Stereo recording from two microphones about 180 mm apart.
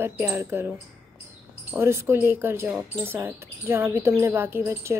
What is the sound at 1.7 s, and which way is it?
Speech, 15° right (ahead or behind).